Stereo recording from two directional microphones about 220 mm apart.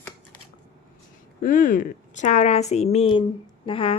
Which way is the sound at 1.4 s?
35° left (ahead or behind).